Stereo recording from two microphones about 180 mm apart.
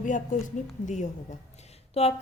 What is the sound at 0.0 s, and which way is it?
A woman's voice, 45° left (ahead or behind).